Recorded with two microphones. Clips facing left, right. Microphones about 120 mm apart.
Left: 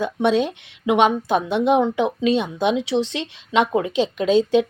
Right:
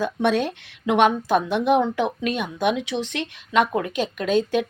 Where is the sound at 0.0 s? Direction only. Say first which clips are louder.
Left 2 dB; 20° left (ahead or behind).